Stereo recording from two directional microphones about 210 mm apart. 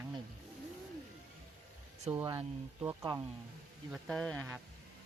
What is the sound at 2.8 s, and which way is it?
Speech, 15° right (ahead or behind).